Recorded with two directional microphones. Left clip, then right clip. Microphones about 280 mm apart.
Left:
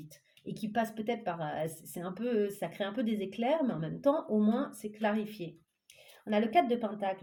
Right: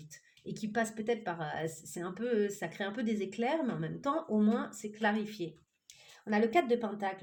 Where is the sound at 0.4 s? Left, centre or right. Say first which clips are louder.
Left 1 dB; right.